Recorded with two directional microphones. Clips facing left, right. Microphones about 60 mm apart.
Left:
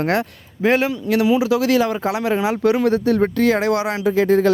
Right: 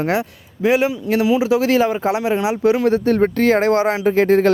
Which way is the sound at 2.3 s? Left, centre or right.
Centre.